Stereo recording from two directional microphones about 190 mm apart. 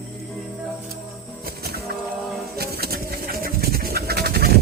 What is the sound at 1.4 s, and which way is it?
Music, 55° right (ahead or behind).